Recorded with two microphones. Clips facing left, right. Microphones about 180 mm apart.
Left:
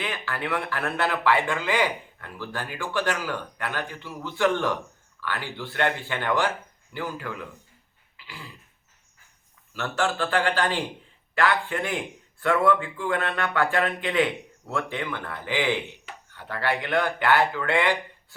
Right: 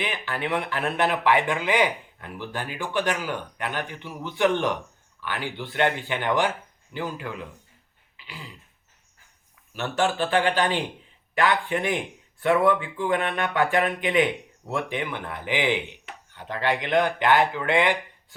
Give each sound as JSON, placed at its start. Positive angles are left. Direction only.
{"t": 0.0, "sound": "speech", "side_deg": -20}
{"t": 8.1, "sound": "throat clearing", "side_deg": -20}
{"t": 9.7, "sound": "speech", "side_deg": -20}